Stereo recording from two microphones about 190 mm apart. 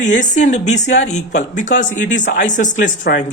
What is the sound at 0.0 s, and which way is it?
Speech, 40° left (ahead or behind).